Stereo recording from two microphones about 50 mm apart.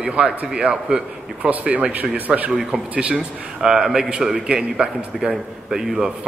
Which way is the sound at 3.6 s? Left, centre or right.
Centre.